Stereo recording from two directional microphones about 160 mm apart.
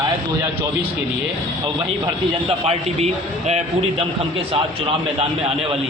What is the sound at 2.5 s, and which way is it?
A man's voice, 40° right (ahead or behind).